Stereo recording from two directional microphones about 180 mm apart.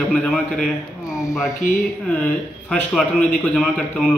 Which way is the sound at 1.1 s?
15° left (ahead or behind).